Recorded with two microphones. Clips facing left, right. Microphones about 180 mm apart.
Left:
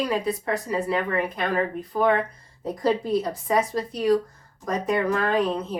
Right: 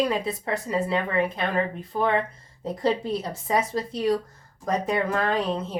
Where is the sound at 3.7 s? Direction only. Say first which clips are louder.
Left 1 dB; 25° right (ahead or behind).